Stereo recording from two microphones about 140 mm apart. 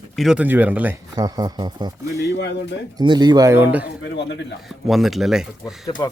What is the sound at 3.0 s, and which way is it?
Speech, 30° right (ahead or behind).